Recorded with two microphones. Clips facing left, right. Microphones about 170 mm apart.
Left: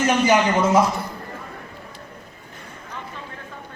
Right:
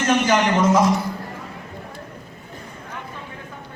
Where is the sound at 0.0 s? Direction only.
10° left (ahead or behind).